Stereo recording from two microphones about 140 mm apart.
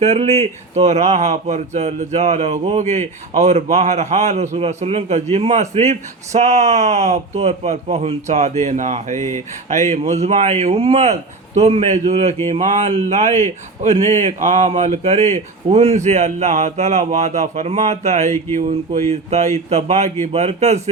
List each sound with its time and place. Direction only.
0.0 s speech: 45° right (ahead or behind)